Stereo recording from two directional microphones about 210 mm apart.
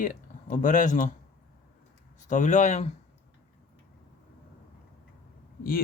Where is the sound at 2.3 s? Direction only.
35° left (ahead or behind).